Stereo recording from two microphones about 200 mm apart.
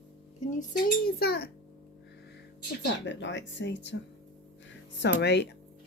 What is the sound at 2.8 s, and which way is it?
A woman's voice, 65° left (ahead or behind).